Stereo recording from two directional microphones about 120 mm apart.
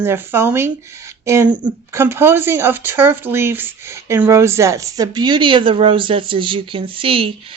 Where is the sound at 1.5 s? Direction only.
40° right (ahead or behind).